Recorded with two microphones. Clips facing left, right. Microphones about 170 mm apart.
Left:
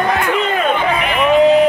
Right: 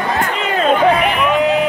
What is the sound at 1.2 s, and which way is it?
Music, 35° left (ahead or behind).